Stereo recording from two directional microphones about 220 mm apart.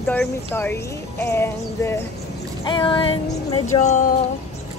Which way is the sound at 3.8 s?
35° left (ahead or behind).